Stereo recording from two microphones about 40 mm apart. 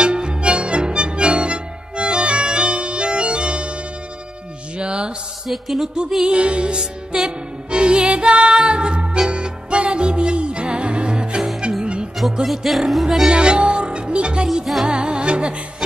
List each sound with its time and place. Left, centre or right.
0.0 s music: right
4.7 s music: right
5.5 s music: centre
6.2 s music: right
12.4 s music: centre
13.3 s music: right